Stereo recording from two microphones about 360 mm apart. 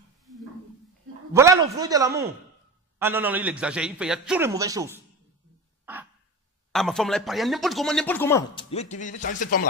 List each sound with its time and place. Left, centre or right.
1.3 s a man's voice: centre
5.8 s dog: centre
6.7 s speech: centre; by 9.6 s left